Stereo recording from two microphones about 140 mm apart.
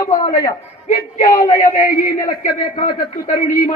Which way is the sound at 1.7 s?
70° left (ahead or behind).